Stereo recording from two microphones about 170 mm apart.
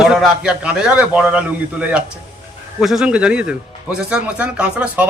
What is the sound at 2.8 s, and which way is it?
A man's voice, 5° right (ahead or behind).